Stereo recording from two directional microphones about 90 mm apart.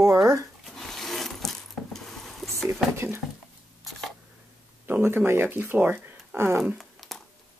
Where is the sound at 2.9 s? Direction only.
25° right (ahead or behind).